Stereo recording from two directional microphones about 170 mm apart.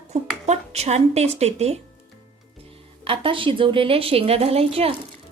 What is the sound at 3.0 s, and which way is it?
A woman's voice, 30° right (ahead or behind).